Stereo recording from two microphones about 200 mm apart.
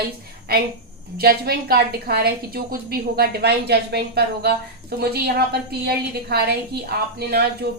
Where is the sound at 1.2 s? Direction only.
50° right (ahead or behind).